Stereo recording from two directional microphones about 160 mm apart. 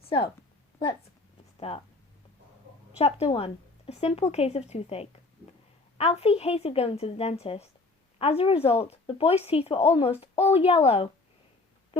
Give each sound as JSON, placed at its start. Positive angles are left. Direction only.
{"t": 0.0, "sound": "a woman's voice", "side_deg": 35}
{"t": 1.5, "sound": "speech", "side_deg": 35}
{"t": 3.0, "sound": "speech", "side_deg": 40}